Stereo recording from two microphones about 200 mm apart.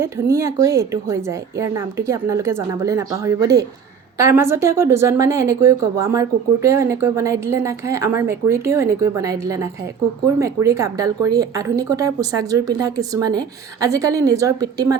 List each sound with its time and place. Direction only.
0.0 s a woman's voice: 15° right (ahead or behind)